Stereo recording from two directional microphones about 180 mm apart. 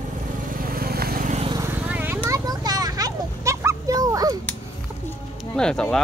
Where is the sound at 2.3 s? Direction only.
20° right (ahead or behind).